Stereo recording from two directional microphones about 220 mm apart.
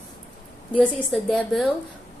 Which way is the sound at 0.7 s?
5° left (ahead or behind).